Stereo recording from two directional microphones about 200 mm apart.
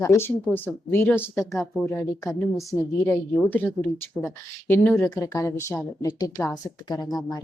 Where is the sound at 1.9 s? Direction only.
15° left (ahead or behind).